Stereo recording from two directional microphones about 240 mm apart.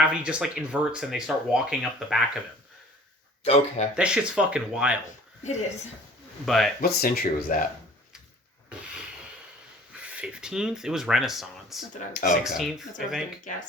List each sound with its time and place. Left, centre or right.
0.1 s speech: centre
3.4 s speech: left
3.9 s speech: centre
5.4 s a woman's voice: left
6.4 s speech: centre
6.8 s speech: left
8.7 s a sound: centre
10.1 s speech: centre